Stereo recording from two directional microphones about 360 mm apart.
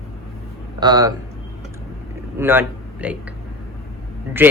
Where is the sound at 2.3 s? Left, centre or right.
Centre.